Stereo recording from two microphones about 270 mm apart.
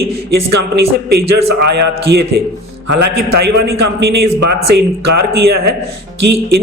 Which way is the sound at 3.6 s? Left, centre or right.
Right.